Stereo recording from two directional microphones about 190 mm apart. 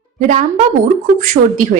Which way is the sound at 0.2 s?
40° right (ahead or behind).